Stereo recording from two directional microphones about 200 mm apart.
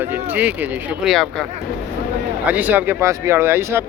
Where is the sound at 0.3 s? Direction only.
10° right (ahead or behind).